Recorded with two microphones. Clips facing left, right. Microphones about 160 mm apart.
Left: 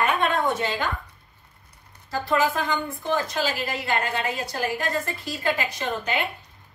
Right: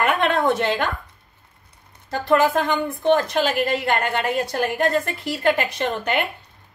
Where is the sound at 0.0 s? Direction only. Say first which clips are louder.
Right 3 dB; 75° right (ahead or behind).